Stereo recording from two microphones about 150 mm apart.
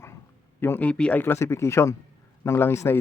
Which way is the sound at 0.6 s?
10° left (ahead or behind).